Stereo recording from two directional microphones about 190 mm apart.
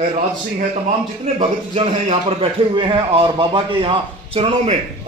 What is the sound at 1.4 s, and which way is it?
Speech, 35° right (ahead or behind).